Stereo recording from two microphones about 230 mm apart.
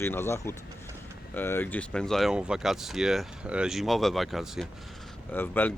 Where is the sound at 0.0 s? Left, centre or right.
Centre.